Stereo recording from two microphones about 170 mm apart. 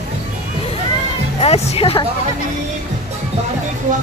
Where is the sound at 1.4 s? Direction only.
35° left (ahead or behind).